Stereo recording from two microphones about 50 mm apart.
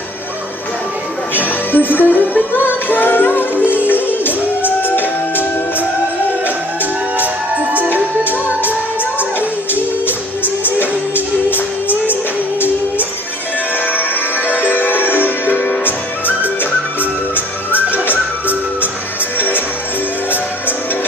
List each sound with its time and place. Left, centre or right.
1.3 s music: left
7.2 s music: right
9.8 s music: left
14.5 s music: left
18.1 s music: right
19.3 s music: left